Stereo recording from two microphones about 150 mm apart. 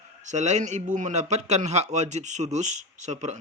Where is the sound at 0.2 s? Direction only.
50° right (ahead or behind).